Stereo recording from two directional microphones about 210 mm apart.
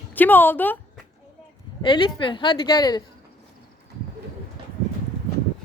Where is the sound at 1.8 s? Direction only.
25° left (ahead or behind).